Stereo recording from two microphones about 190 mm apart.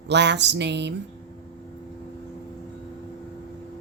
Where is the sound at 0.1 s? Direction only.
65° right (ahead or behind).